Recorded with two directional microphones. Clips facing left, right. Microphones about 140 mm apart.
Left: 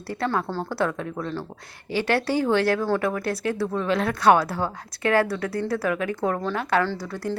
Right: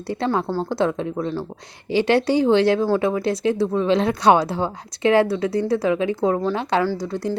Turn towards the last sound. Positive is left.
turn(degrees=-15)  # may be behind; listen again after turning